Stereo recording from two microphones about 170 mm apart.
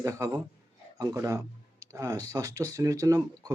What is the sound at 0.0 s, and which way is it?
Speech, 20° right (ahead or behind).